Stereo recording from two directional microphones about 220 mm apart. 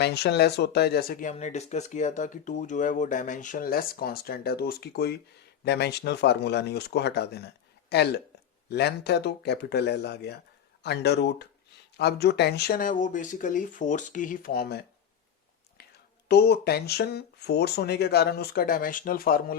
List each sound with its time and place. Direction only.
0.0 s speech: 50° left (ahead or behind)
16.3 s speech: 45° left (ahead or behind)